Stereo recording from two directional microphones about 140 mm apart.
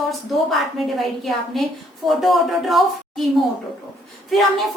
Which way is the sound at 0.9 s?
Centre (ahead or behind).